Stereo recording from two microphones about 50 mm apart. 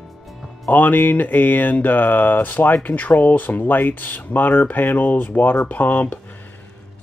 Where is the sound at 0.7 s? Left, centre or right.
Left.